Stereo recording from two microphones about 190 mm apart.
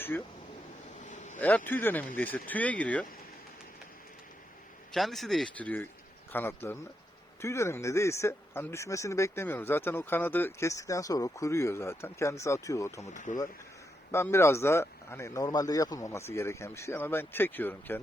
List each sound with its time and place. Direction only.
1.0 s vehicle: 40° left (ahead or behind)
1.4 s speech: 10° left (ahead or behind)
4.9 s speech: centre (ahead or behind); by 13.1 s 15° left (ahead or behind)
13.1 s speech: 40° left (ahead or behind)
14.1 s speech: 15° left (ahead or behind)